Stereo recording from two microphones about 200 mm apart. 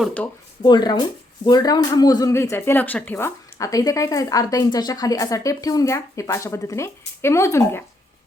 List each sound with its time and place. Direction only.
0.0 s speech: 5° left (ahead or behind)
0.6 s speech: 20° left (ahead or behind)